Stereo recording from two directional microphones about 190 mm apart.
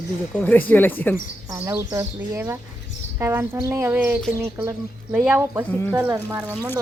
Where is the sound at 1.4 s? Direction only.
15° right (ahead or behind).